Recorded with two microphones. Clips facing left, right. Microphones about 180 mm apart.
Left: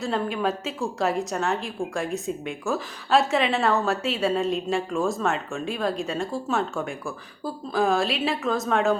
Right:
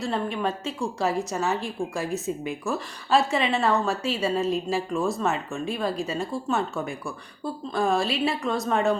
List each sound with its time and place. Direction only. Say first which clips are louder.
0.0 s a woman's voice: left 1 dB; centre (ahead or behind)